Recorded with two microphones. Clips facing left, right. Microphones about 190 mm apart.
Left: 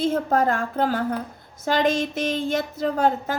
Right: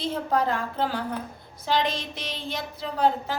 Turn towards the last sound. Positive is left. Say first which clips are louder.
# left 3 dB
turn(degrees=45)  # may be behind; listen again after turning